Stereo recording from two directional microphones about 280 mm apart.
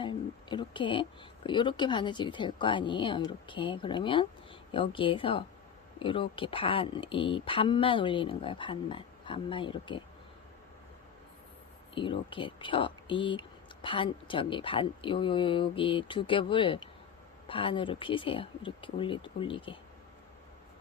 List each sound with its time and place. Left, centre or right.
0.0 s a sound: centre
1.5 s speech: centre
11.9 s speech: centre